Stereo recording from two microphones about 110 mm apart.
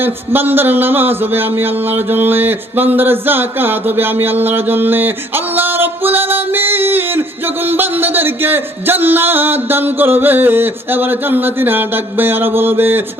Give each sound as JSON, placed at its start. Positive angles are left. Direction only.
{"t": 0.0, "sound": "music", "side_deg": -20}